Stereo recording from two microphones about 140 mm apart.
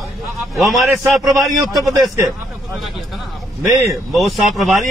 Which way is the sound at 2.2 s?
Centre (ahead or behind).